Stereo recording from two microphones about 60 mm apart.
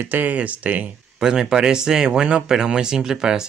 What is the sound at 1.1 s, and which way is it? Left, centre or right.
Speech, centre.